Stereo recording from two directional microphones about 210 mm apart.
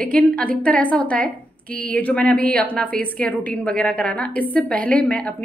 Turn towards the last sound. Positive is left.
turn(degrees=5)  # may be behind; listen again after turning